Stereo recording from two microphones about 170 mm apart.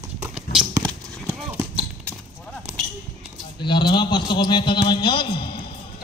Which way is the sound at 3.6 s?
25° left (ahead or behind).